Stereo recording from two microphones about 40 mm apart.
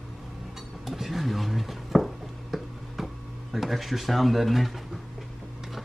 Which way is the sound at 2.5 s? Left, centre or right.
Centre.